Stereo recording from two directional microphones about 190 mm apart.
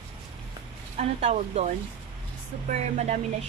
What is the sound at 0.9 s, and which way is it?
Speech, 35° right (ahead or behind).